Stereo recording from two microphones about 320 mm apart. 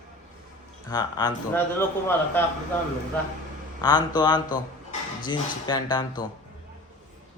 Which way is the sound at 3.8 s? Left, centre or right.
Centre.